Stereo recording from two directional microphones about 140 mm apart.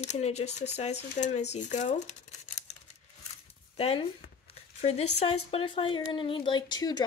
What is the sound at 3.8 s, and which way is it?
Speech, 45° left (ahead or behind).